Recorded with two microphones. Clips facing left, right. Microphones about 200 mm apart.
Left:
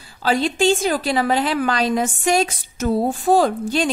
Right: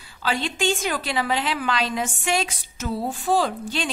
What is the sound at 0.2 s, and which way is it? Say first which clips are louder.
A woman's voice: left 7 dB; 40° left (ahead or behind).